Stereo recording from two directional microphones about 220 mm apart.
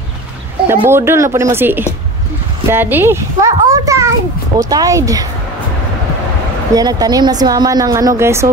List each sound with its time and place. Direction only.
0.7 s a woman's voice: 10° right (ahead or behind)
6.7 s a woman's voice: 15° right (ahead or behind)